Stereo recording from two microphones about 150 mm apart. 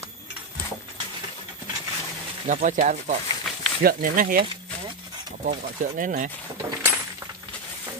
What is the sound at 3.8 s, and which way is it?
Speech, 75° right (ahead or behind).